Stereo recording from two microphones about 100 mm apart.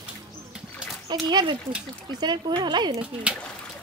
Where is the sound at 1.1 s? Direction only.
45° right (ahead or behind).